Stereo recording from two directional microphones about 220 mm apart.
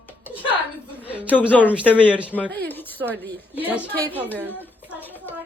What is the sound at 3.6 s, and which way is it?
Speech, 5° right (ahead or behind).